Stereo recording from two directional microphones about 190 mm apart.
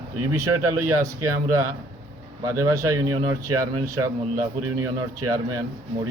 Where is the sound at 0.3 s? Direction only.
15° right (ahead or behind).